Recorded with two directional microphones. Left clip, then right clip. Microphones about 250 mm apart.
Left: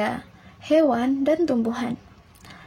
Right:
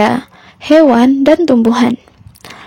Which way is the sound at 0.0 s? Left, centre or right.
Right.